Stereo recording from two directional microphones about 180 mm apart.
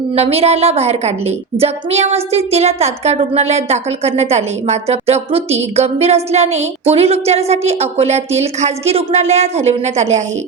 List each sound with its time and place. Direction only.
0.1 s a woman's voice: 35° right (ahead or behind)